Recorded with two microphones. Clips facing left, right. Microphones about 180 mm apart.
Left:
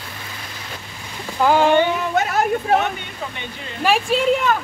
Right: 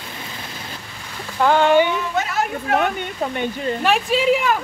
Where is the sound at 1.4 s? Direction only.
5° left (ahead or behind).